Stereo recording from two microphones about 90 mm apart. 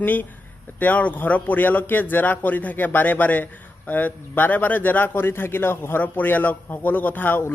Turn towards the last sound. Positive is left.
turn(degrees=20)  # may be behind; listen again after turning